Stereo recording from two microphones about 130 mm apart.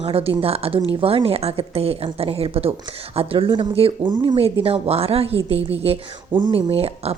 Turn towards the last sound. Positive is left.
turn(degrees=-50)  # may be behind; listen again after turning